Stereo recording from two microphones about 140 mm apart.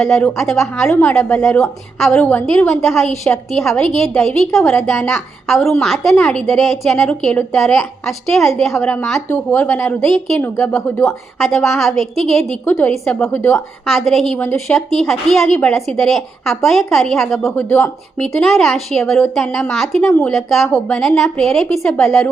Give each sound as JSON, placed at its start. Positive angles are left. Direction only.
{"t": 0.0, "sound": "a woman's voice", "side_deg": 0}
{"t": 0.9, "sound": "speech", "side_deg": 15}
{"t": 1.5, "sound": "a woman's voice", "side_deg": 5}
{"t": 11.0, "sound": "a woman's voice", "side_deg": 0}
{"t": 12.6, "sound": "speech", "side_deg": 15}
{"t": 13.5, "sound": "a woman's voice", "side_deg": 0}
{"t": 14.3, "sound": "speech", "side_deg": 20}
{"t": 14.7, "sound": "a woman's voice", "side_deg": 0}
{"t": 17.5, "sound": "speech", "side_deg": 15}
{"t": 18.2, "sound": "a woman's voice", "side_deg": 5}